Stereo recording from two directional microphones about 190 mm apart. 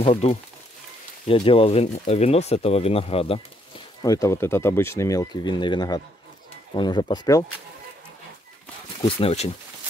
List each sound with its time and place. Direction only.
0.0 s speech: 35° left (ahead or behind)
4.0 s speech: 15° left (ahead or behind)
9.0 s speech: 30° left (ahead or behind)